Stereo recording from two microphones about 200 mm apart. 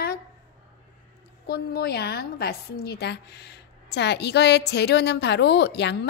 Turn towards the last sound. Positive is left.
turn(degrees=55)  # may be behind; listen again after turning